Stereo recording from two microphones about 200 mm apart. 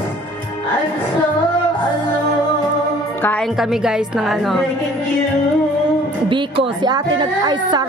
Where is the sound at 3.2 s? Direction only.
5° left (ahead or behind).